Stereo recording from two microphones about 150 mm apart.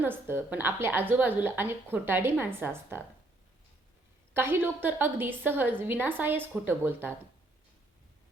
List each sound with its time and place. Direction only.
0.0 s a woman's voice: 15° right (ahead or behind)
4.4 s a woman's voice: 15° right (ahead or behind)